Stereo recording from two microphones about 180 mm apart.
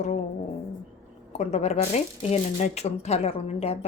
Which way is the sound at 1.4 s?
40° left (ahead or behind).